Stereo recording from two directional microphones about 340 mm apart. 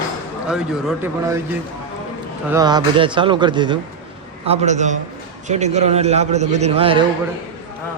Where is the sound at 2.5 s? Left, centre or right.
Centre.